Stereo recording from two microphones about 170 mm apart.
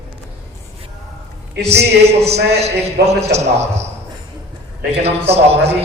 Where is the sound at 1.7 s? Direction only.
75° right (ahead or behind).